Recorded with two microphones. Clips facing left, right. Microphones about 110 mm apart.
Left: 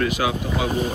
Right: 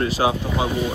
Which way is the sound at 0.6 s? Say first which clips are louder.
Left 1 dB; 40° left (ahead or behind).